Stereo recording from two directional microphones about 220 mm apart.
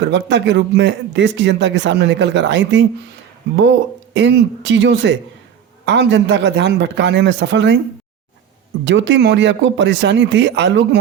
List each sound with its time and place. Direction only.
0.0 s speech: 55° right (ahead or behind)
8.8 s speech: 55° right (ahead or behind)